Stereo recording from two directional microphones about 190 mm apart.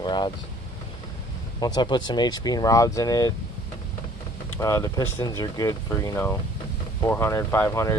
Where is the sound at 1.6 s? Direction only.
20° left (ahead or behind).